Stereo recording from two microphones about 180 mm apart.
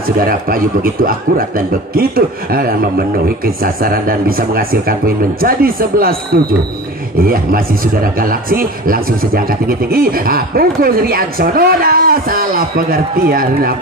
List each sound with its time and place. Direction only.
0.2 s a man's voice: 50° right (ahead or behind)
7.2 s speech: 55° right (ahead or behind)